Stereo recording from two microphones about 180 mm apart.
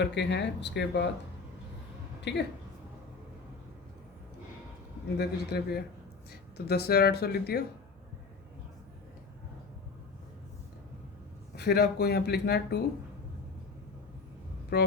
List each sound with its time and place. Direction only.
0.0 s speech: 70° left (ahead or behind)
2.3 s speech: 70° left (ahead or behind)
5.1 s speech: 60° left (ahead or behind)
11.5 s speech: 65° left (ahead or behind)
14.7 s speech: 65° left (ahead or behind)